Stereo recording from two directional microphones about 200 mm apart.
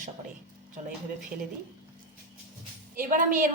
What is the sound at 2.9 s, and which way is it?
Speech, 45° right (ahead or behind).